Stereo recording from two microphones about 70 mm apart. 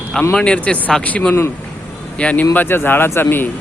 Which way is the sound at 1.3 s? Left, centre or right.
Left.